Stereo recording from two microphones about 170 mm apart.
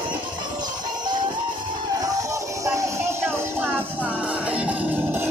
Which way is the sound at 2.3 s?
20° right (ahead or behind).